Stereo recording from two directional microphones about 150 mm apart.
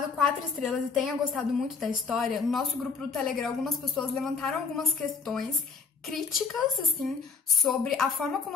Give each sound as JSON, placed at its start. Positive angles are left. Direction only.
{"t": 0.6, "sound": "a woman's voice", "side_deg": 0}